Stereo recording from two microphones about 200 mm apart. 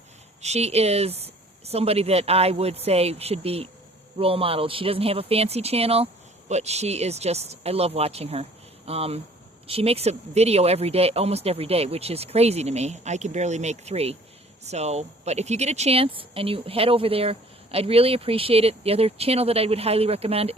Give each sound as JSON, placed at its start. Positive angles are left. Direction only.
{"t": 0.4, "sound": "speech", "side_deg": -35}